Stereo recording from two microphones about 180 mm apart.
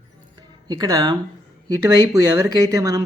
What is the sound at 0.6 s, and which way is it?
Speech, 20° right (ahead or behind).